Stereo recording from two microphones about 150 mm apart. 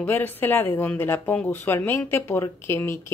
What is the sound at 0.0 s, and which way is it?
Speech, 10° left (ahead or behind).